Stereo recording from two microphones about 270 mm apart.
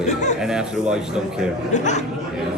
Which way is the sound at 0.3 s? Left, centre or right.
Centre.